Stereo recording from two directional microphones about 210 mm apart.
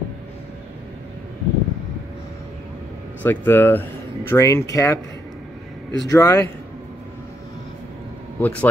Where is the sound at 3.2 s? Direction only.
10° left (ahead or behind).